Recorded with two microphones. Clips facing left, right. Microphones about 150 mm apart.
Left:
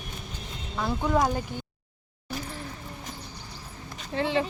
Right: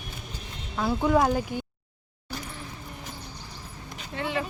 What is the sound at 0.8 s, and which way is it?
Speech, 5° right (ahead or behind).